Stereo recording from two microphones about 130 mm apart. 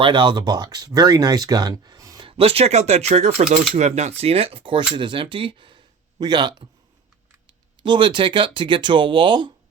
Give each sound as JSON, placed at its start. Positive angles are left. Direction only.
{"t": 0.0, "sound": "speech", "side_deg": -35}
{"t": 2.2, "sound": "speech", "side_deg": -45}
{"t": 7.8, "sound": "speech", "side_deg": -35}